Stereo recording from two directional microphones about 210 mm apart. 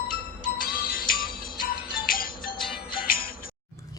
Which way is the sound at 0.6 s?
45° left (ahead or behind).